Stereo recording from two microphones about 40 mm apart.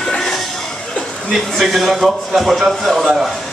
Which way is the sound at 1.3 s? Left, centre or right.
Centre.